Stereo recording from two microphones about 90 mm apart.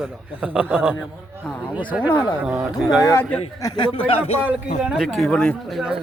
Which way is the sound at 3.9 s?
90° left.